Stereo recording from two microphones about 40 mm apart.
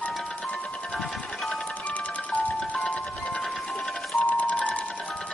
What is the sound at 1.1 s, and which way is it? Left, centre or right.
Music, centre.